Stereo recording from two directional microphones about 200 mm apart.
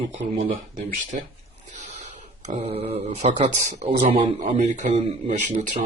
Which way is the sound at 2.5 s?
35° right (ahead or behind).